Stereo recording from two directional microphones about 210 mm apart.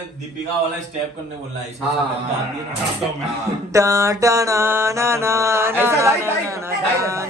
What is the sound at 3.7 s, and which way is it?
Mantra, 15° right (ahead or behind).